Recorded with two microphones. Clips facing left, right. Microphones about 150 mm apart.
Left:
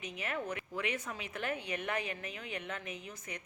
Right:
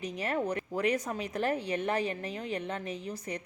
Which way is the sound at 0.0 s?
35° right (ahead or behind).